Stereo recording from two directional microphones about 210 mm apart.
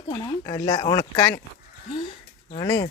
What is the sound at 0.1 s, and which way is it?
Speech, 20° left (ahead or behind).